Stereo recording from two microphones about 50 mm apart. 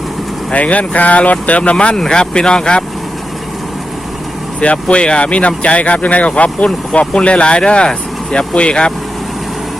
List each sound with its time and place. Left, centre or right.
0.5 s speech: left
4.6 s speech: left